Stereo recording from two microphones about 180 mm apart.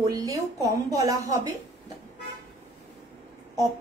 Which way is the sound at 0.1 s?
20° right (ahead or behind).